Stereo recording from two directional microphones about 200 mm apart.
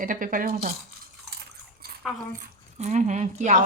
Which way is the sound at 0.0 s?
45° right (ahead or behind).